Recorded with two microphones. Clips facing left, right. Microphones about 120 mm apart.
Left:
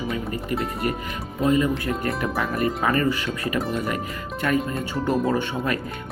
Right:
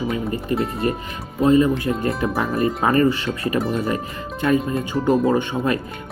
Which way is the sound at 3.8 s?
25° right (ahead or behind).